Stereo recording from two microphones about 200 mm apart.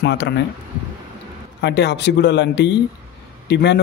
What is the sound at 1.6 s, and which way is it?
A man's voice, 60° left (ahead or behind).